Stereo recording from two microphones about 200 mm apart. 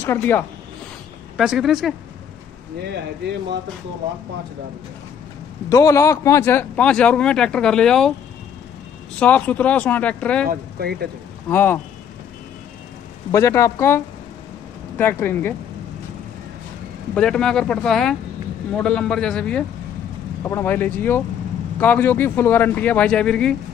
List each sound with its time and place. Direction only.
0.0 s a man's voice: 10° left (ahead or behind)
1.3 s a man's voice: 5° right (ahead or behind)
5.7 s a man's voice: 15° left (ahead or behind)
9.2 s a man's voice: 5° left (ahead or behind)
10.4 s speech: 50° right (ahead or behind)
11.4 s a man's voice: 10° left (ahead or behind)
13.3 s a man's voice: 15° left (ahead or behind)
17.1 s a man's voice: 5° left (ahead or behind)